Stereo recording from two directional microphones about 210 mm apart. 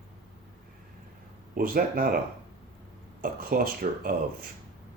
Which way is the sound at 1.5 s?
45° right (ahead or behind).